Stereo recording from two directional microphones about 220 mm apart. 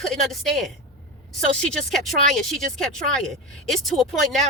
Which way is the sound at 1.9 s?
Centre (ahead or behind).